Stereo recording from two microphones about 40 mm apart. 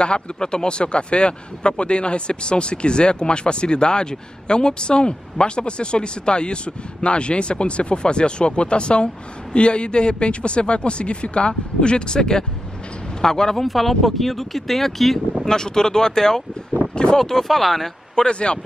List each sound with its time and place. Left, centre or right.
0.0 s speech: left
13.7 s speech: centre
15.4 s speech: centre
17.2 s speech: centre
18.1 s speech: left